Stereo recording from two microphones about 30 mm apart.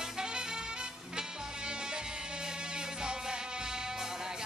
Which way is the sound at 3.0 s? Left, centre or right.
Right.